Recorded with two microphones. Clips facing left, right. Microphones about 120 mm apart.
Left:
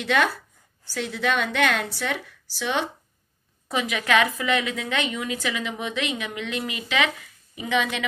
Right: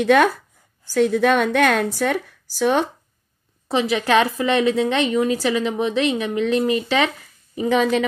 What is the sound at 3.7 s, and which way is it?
A woman's voice, 30° right (ahead or behind).